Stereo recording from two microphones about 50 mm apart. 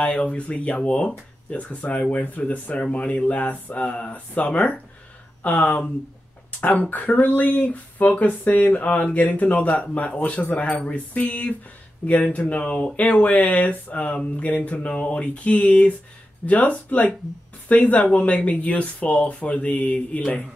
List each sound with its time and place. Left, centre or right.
0.0 s speech: left